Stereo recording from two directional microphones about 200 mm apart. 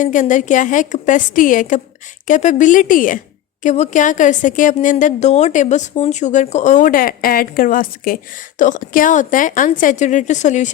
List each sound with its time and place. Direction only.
0.0 s a woman's voice: 40° left (ahead or behind)